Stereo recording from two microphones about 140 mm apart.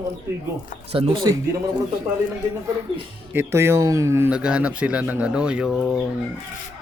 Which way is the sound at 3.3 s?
15° right (ahead or behind).